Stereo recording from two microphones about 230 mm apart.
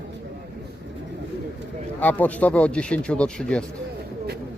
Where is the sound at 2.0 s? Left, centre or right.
Centre.